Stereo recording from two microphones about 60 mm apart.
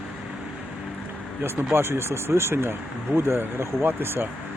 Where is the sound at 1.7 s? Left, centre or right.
Right.